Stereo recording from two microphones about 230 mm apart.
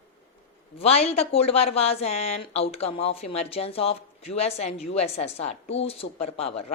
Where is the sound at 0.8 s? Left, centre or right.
Left.